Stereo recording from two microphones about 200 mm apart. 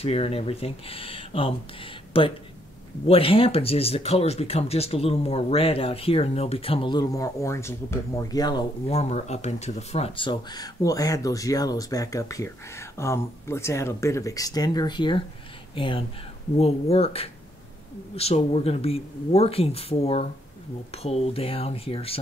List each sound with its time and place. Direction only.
0.0 s speech: 30° left (ahead or behind)
8.9 s speech: 35° left (ahead or behind)